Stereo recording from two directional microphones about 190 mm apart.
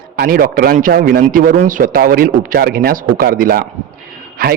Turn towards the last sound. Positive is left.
turn(degrees=-50)  # may be behind; listen again after turning